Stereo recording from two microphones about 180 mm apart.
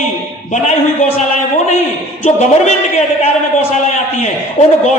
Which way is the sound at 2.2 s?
40° left (ahead or behind).